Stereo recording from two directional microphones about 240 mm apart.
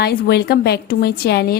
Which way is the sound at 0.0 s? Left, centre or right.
Left.